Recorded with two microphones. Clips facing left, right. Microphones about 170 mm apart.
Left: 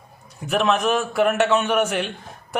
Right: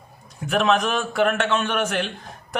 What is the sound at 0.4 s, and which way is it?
Speech, centre (ahead or behind).